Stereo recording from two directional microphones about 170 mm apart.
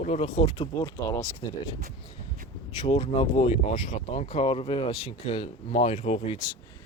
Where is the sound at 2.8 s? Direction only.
35° left (ahead or behind).